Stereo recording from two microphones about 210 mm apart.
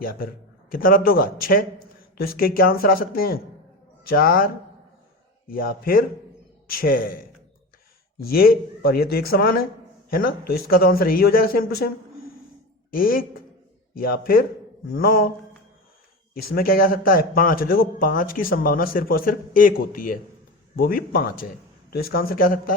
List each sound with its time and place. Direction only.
0.0 s a man's voice: 45° left (ahead or behind)
8.2 s a man's voice: 45° left (ahead or behind)
16.3 s a man's voice: 45° left (ahead or behind)